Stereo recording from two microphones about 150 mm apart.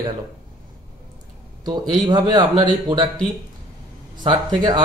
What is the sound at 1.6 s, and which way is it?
Speech, 25° right (ahead or behind).